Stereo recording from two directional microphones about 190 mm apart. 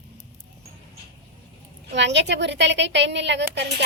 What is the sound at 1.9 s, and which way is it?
A woman's voice, 65° right (ahead or behind).